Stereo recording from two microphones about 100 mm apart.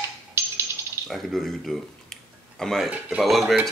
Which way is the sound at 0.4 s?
30° right (ahead or behind).